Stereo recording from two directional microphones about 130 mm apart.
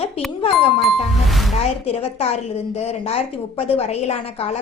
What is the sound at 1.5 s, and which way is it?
A woman's voice, 55° left (ahead or behind).